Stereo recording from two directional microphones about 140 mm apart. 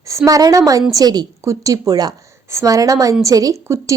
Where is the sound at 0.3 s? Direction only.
25° right (ahead or behind).